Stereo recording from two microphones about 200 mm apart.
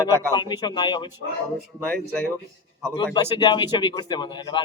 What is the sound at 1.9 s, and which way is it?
Speech, 10° left (ahead or behind).